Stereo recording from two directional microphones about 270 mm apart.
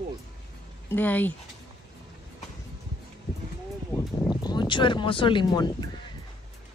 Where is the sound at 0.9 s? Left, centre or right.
Centre.